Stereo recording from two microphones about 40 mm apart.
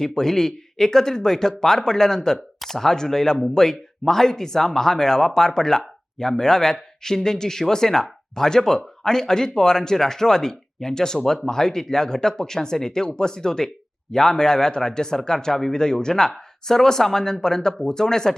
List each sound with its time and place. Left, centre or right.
0.0 s speech: centre